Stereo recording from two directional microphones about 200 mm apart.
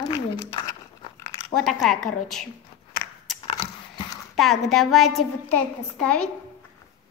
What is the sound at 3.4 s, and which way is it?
Dog, 25° left (ahead or behind).